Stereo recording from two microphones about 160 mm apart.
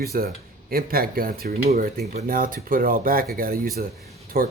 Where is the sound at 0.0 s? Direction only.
75° right (ahead or behind).